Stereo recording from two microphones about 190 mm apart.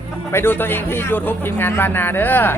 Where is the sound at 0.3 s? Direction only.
10° left (ahead or behind).